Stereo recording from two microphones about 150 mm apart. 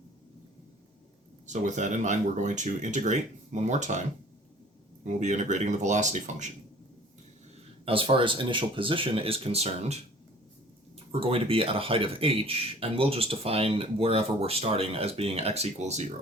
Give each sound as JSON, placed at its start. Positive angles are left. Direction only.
{"t": 1.5, "sound": "speech", "side_deg": -55}
{"t": 5.0, "sound": "speech", "side_deg": -50}
{"t": 7.9, "sound": "speech", "side_deg": -35}
{"t": 11.1, "sound": "speech", "side_deg": -40}